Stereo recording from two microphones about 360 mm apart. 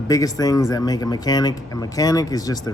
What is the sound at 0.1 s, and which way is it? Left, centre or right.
Speech, centre.